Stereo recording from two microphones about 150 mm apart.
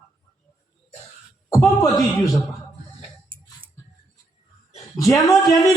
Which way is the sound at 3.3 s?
35° right (ahead or behind).